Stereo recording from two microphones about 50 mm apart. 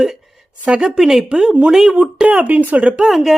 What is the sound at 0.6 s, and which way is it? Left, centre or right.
Speech, right.